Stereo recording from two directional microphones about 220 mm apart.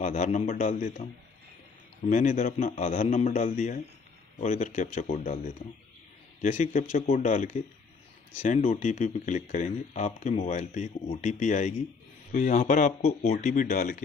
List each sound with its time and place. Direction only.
0.0 s speech: 35° left (ahead or behind)
2.0 s speech: 35° left (ahead or behind)
6.4 s speech: 35° left (ahead or behind)